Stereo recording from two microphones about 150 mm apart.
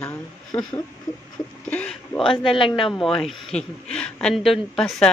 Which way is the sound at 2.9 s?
5° left (ahead or behind).